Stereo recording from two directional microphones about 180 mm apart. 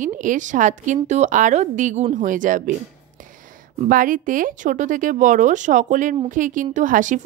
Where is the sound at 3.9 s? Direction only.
50° right (ahead or behind).